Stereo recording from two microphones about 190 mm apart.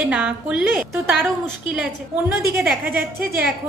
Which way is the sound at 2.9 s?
55° right (ahead or behind).